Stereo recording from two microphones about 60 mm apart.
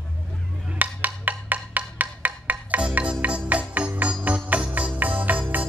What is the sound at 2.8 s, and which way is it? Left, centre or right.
Music, centre.